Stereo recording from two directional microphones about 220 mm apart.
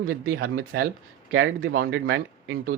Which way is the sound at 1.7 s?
60° right (ahead or behind).